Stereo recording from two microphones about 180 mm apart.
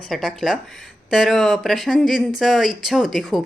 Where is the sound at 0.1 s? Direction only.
Centre (ahead or behind).